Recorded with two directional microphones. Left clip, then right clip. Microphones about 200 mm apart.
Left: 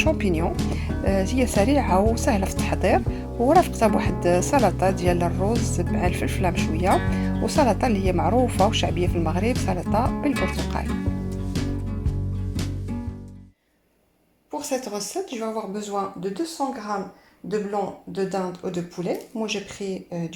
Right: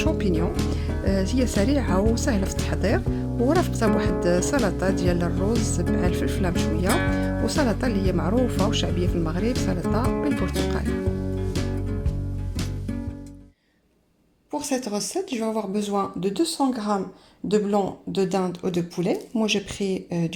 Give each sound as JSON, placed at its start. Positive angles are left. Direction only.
{"t": 0.0, "sound": "speech", "side_deg": -15}
{"t": 0.5, "sound": "music", "side_deg": 0}
{"t": 1.0, "sound": "speech", "side_deg": -15}
{"t": 3.3, "sound": "speech", "side_deg": 0}
{"t": 3.7, "sound": "speech", "side_deg": -15}
{"t": 11.4, "sound": "music", "side_deg": 0}
{"t": 14.5, "sound": "speech", "side_deg": -25}